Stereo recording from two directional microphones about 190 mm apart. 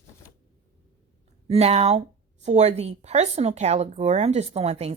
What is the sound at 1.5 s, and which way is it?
Speech, 35° right (ahead or behind).